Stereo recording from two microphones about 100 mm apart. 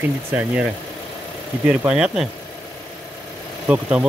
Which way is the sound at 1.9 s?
5° right (ahead or behind).